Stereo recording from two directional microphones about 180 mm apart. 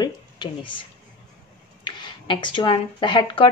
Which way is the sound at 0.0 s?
25° left (ahead or behind).